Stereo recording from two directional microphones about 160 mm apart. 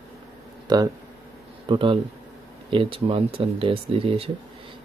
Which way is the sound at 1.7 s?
30° right (ahead or behind).